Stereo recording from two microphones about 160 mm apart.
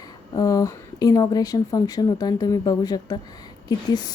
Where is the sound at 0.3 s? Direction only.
20° left (ahead or behind).